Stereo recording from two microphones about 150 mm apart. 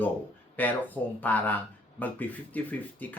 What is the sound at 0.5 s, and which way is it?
Speech, 10° left (ahead or behind).